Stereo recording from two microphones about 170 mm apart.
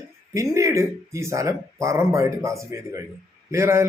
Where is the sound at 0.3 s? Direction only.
15° right (ahead or behind).